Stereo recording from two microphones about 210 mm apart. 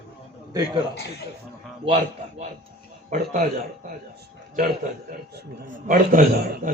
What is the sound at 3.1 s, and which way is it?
Speech, 35° right (ahead or behind).